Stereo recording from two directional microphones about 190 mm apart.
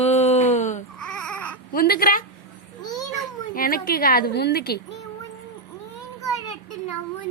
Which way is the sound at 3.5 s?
50° left (ahead or behind).